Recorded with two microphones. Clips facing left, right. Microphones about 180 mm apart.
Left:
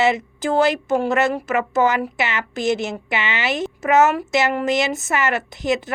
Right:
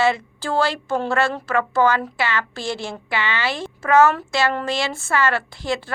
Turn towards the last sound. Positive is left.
turn(degrees=20)  # may be behind; listen again after turning